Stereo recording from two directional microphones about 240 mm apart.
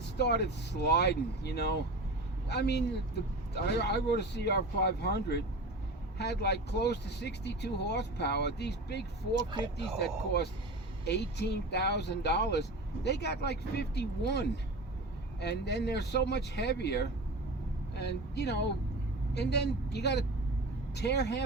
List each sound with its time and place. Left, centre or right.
0.2 s speech: left
9.3 s speech: centre
10.0 s speech: left